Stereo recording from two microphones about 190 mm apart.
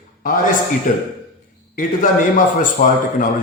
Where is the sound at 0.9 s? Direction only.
45° left (ahead or behind).